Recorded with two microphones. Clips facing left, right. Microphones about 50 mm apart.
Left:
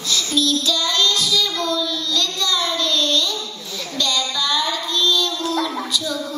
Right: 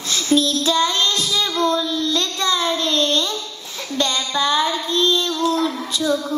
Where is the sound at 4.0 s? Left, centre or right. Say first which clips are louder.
Right 2 dB; right.